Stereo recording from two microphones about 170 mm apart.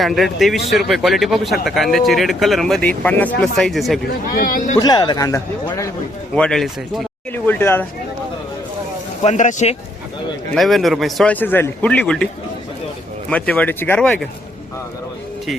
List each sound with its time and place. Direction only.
0.0 s speech: centre (ahead or behind)
4.0 s speech: 60° left (ahead or behind)
4.8 s speech: 25° left (ahead or behind)
6.3 s speech: 5° left (ahead or behind)
9.2 s speech: 45° left (ahead or behind)
10.5 s speech: centre (ahead or behind)
13.3 s speech: 10° left (ahead or behind)